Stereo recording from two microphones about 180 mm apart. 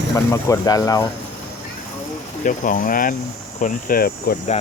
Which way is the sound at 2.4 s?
50° left (ahead or behind).